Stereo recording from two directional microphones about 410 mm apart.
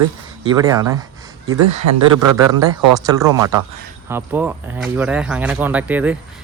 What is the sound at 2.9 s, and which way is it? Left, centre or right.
Speech, centre.